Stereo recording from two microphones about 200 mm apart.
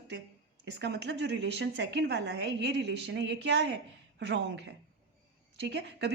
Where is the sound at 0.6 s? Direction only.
60° right (ahead or behind).